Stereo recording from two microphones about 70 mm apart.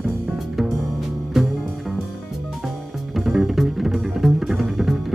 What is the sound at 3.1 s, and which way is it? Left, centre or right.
Music, centre.